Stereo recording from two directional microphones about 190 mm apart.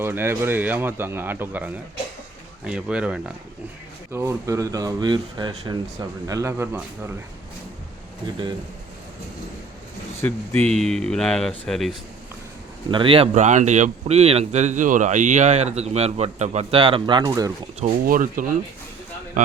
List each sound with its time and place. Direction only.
0.0 s speech: 10° right (ahead or behind)
10.2 s speech: 10° left (ahead or behind)
12.9 s speech: 25° right (ahead or behind)
18.0 s speech: 45° right (ahead or behind)